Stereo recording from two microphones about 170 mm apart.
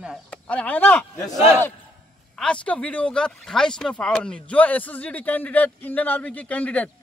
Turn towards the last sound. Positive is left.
turn(degrees=10)  # may be behind; listen again after turning